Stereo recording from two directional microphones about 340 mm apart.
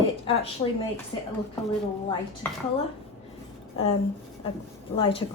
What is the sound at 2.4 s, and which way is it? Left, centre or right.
Speech, centre.